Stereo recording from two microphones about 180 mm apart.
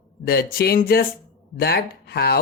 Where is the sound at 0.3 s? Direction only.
60° left (ahead or behind).